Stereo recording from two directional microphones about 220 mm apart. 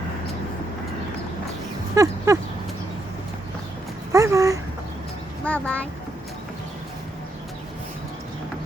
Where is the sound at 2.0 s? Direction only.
15° right (ahead or behind).